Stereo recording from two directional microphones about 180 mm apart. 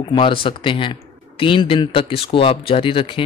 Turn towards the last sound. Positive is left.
turn(degrees=30)  # may be behind; listen again after turning